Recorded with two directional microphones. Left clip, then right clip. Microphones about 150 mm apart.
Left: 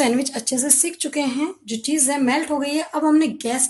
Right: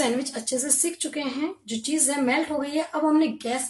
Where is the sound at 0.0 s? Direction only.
70° left (ahead or behind).